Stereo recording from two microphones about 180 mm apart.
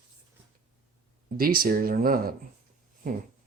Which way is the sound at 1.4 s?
55° right (ahead or behind).